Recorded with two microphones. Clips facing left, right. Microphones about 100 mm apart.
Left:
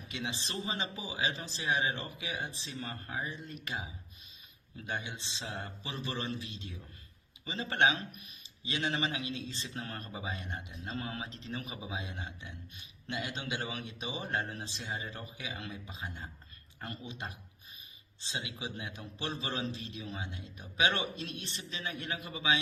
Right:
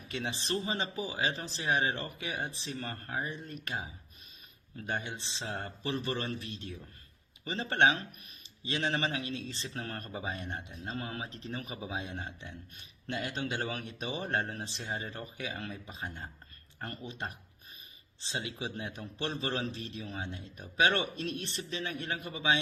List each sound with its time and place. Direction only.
0.1 s a man's voice: 45° right (ahead or behind)
4.9 s a man's voice: 45° right (ahead or behind)
8.6 s a man's voice: 40° right (ahead or behind)